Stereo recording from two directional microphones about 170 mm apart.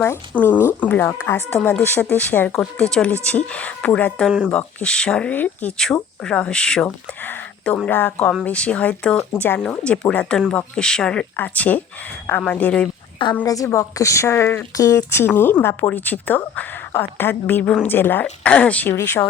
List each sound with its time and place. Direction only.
0.0 s speech: 15° left (ahead or behind)
13.4 s speech: 20° left (ahead or behind)